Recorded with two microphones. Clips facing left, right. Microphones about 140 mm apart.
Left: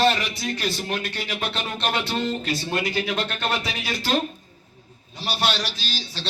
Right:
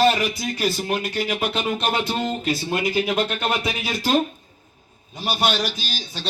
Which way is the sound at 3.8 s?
45° right (ahead or behind).